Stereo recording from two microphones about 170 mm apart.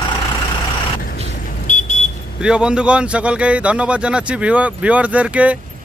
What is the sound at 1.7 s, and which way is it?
Vehicle, 45° left (ahead or behind).